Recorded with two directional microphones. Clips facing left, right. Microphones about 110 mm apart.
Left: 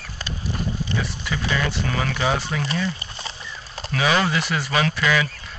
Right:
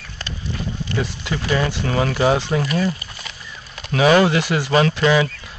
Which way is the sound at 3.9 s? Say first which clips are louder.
Right 7 dB; 45° right (ahead or behind).